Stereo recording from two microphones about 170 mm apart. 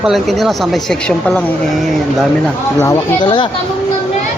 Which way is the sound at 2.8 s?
20° left (ahead or behind).